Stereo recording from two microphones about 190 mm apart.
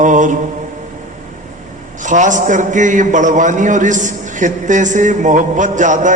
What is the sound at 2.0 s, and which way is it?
A man's voice, 40° right (ahead or behind).